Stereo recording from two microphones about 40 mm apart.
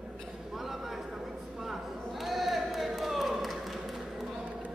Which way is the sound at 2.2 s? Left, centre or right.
Centre.